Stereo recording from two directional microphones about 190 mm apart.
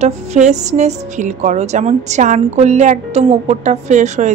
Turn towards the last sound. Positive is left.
turn(degrees=-40)  # may be behind; listen again after turning